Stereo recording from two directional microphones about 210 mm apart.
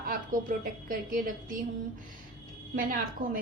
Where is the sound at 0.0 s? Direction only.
40° right (ahead or behind).